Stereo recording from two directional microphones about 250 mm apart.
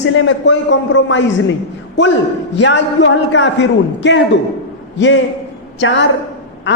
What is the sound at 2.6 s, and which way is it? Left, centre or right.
A man's voice, left.